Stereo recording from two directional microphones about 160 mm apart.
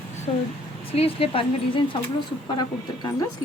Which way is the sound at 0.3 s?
40° left (ahead or behind).